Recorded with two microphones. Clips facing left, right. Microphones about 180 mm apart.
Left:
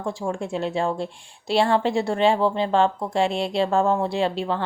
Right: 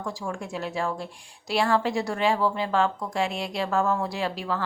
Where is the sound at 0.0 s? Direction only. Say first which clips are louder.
Left 5 dB; 30° left (ahead or behind).